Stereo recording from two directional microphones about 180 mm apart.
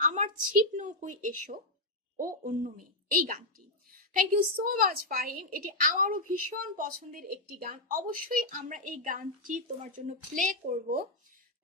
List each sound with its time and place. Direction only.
0.0 s a woman's voice: 45° right (ahead or behind)